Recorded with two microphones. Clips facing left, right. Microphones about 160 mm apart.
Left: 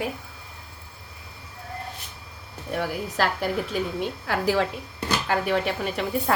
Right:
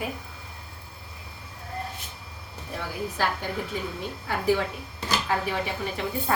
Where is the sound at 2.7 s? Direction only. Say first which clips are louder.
Left 5 dB; 80° left.